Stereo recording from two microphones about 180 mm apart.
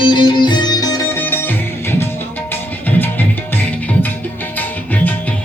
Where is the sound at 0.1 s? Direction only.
25° left (ahead or behind).